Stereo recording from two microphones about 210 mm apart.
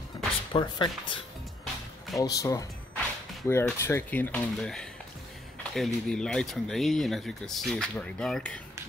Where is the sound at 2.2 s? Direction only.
15° left (ahead or behind).